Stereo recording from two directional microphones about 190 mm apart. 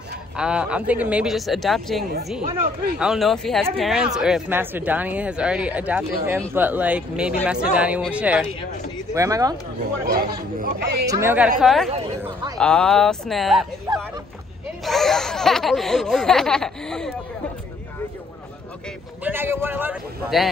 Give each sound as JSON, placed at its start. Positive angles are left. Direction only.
{"t": 0.4, "sound": "a sound", "side_deg": -5}
{"t": 3.7, "sound": "speech", "side_deg": 0}
{"t": 9.1, "sound": "speech", "side_deg": -15}
{"t": 10.6, "sound": "speech", "side_deg": -55}
{"t": 11.1, "sound": "speech", "side_deg": -15}
{"t": 11.6, "sound": "a sound", "side_deg": 0}
{"t": 13.9, "sound": "speech", "side_deg": -20}
{"t": 14.9, "sound": "a sound", "side_deg": 0}
{"t": 19.2, "sound": "speech", "side_deg": -10}